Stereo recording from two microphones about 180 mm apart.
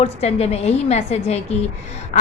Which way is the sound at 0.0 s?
35° left (ahead or behind).